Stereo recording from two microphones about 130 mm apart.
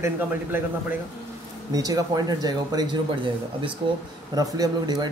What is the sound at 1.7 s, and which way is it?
Speech, 30° right (ahead or behind).